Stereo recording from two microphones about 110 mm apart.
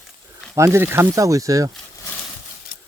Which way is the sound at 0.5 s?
25° right (ahead or behind).